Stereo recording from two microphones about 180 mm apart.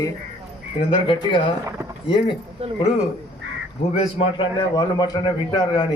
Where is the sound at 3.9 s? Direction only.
30° left (ahead or behind).